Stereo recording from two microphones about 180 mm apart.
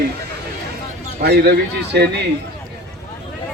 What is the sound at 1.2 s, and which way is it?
Speech, 65° right (ahead or behind).